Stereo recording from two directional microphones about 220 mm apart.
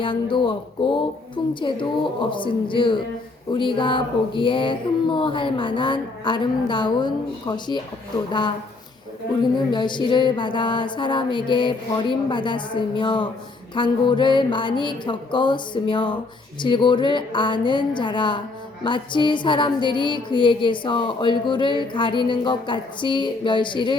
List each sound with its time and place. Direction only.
0.0 s music: 25° left (ahead or behind)